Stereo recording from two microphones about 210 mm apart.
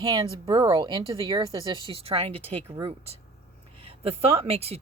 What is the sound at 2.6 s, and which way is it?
Speech, 15° right (ahead or behind).